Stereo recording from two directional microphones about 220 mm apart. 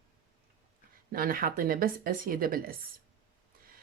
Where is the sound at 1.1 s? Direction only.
40° right (ahead or behind).